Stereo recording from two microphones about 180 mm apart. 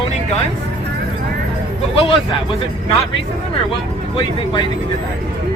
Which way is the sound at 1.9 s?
30° left (ahead or behind).